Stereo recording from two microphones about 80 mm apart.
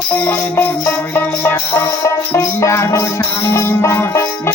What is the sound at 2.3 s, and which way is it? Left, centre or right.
Music, left.